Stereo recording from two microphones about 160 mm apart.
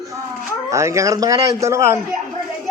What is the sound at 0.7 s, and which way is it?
Speech, 20° right (ahead or behind).